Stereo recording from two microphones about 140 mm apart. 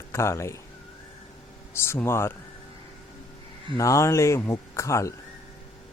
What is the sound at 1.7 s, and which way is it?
Speech, 20° left (ahead or behind).